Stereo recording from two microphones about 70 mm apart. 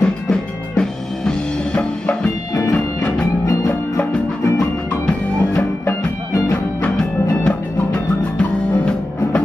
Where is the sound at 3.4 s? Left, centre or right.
Left.